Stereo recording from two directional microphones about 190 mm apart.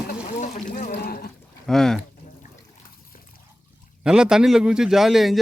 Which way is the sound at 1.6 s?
Centre (ahead or behind).